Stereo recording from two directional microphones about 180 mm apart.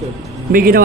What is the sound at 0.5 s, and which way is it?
Speech, 50° right (ahead or behind).